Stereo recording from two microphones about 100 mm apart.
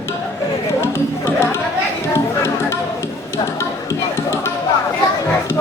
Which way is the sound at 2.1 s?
25° left (ahead or behind).